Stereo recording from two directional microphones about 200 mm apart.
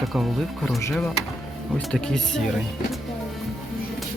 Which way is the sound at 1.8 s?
5° left (ahead or behind).